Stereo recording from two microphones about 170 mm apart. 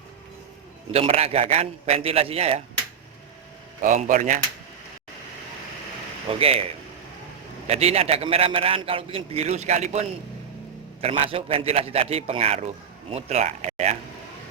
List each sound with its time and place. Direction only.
0.9 s a man's voice: 35° right (ahead or behind)
3.8 s speech: 50° right (ahead or behind)
6.2 s speech: 35° right (ahead or behind)
7.7 s a man's voice: 35° right (ahead or behind)
11.3 s a man's voice: 35° right (ahead or behind)